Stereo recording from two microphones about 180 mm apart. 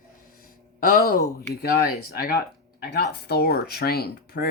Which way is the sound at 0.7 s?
50° left (ahead or behind).